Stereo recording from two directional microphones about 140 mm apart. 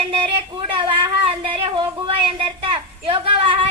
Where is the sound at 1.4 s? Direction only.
40° right (ahead or behind).